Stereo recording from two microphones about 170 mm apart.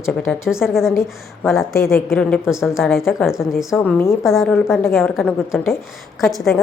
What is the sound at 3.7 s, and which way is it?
Speech, 15° left (ahead or behind).